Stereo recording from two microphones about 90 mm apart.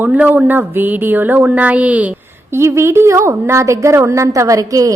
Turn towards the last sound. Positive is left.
turn(degrees=-40)  # may be behind; listen again after turning